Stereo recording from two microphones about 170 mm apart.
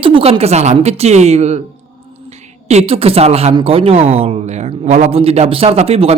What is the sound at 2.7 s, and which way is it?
A man's voice, 35° right (ahead or behind).